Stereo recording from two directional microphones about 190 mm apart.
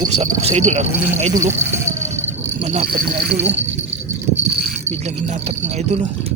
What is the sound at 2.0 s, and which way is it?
Vehicle, 35° right (ahead or behind).